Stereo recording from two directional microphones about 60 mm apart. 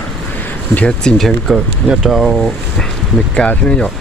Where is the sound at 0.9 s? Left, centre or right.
Centre.